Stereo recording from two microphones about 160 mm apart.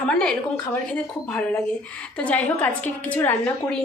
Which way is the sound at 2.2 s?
10° left (ahead or behind).